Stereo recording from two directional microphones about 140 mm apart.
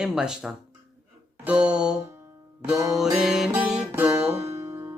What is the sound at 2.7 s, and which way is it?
Music, 25° right (ahead or behind).